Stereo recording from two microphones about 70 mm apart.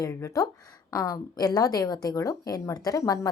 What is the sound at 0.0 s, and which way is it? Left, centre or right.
A woman's voice, left.